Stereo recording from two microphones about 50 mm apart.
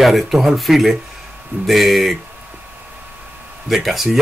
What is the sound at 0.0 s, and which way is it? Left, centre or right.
Speech, centre.